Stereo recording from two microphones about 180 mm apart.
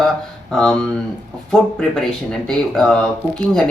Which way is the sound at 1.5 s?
Centre (ahead or behind).